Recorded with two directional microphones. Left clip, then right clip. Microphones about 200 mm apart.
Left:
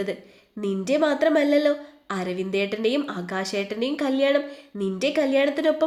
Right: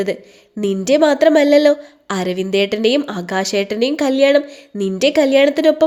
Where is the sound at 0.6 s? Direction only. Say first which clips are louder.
Right 9 dB; 35° right (ahead or behind).